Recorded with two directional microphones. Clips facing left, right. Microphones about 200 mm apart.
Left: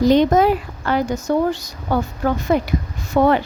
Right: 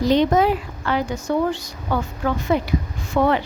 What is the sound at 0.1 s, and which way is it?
Speech, 45° left (ahead or behind).